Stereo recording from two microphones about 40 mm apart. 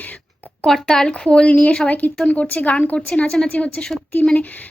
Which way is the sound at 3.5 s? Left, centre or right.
Left.